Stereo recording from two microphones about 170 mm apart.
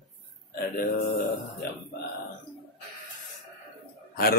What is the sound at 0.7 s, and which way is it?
Speech, 55° left (ahead or behind).